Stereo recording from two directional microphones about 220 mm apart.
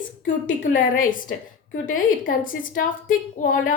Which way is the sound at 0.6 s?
40° left (ahead or behind).